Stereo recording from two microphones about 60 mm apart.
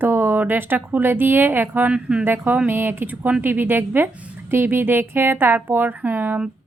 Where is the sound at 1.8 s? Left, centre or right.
Centre.